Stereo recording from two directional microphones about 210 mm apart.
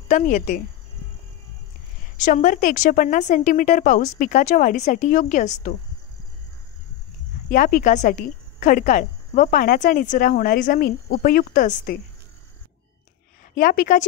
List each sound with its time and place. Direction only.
0.1 s a woman's voice: 35° left (ahead or behind)
2.1 s a woman's voice: 40° left (ahead or behind)
7.4 s a woman's voice: 40° left (ahead or behind)
13.6 s a woman's voice: 40° left (ahead or behind)